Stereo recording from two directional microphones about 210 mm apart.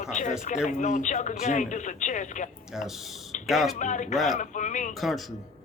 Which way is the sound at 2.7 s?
Centre (ahead or behind).